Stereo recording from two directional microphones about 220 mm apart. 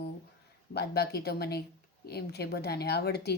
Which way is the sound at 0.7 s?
50° left (ahead or behind).